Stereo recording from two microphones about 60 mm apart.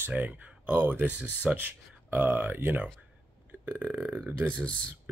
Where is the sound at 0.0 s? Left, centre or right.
Right.